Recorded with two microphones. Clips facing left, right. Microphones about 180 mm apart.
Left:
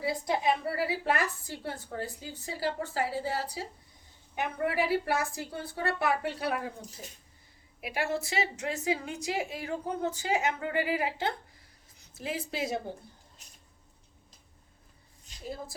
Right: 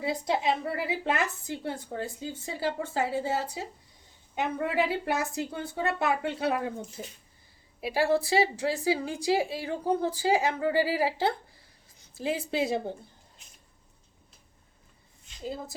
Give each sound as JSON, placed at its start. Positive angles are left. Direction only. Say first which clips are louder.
{"t": 0.0, "sound": "a woman's voice", "louder": "right 1 dB", "side_deg": -20}
{"t": 15.4, "sound": "a woman's voice", "louder": "right 3 dB", "side_deg": -20}